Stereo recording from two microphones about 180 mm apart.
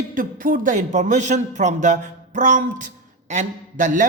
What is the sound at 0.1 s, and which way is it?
Speech, 50° right (ahead or behind).